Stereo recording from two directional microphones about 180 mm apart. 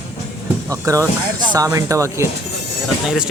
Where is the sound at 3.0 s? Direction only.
5° right (ahead or behind).